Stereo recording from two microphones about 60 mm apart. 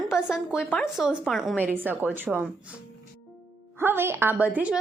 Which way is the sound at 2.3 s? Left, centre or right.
Centre.